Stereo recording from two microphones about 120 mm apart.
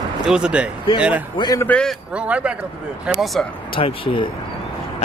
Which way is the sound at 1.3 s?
35° left (ahead or behind).